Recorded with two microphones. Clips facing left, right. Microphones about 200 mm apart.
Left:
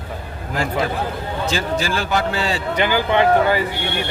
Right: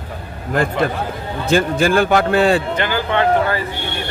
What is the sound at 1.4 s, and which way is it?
A man's voice, 55° right (ahead or behind).